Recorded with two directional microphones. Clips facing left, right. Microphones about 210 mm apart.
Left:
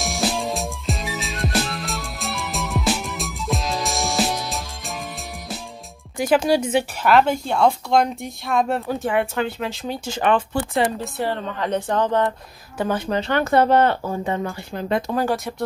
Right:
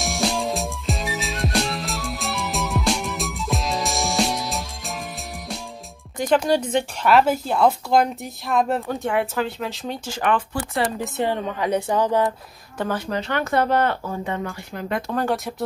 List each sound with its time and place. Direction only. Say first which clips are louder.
0.0 s music: even; centre (ahead or behind)
6.1 s speech: left 1 dB; 10° left (ahead or behind)
10.0 s speech: left 3 dB; 25° left (ahead or behind)
11.1 s a woman's voice: right 1 dB; 15° right (ahead or behind)
12.7 s speech: left 3 dB; 20° left (ahead or behind)
15.0 s speech: left 1 dB; 5° left (ahead or behind)